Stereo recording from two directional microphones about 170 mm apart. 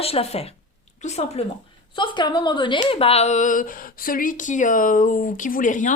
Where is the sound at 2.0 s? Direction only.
25° left (ahead or behind); by 5.9 s 50° left (ahead or behind).